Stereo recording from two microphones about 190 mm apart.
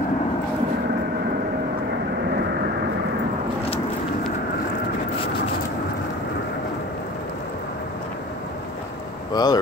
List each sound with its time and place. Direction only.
9.3 s speech: 20° left (ahead or behind)